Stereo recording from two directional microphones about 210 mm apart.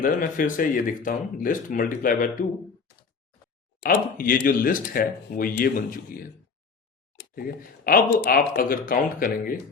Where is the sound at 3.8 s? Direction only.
40° left (ahead or behind).